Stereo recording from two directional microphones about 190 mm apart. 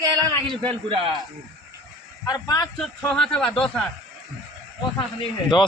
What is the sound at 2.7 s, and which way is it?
Speech, centre (ahead or behind).